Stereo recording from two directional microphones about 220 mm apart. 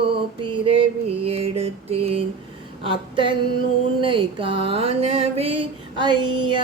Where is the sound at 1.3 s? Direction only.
25° right (ahead or behind).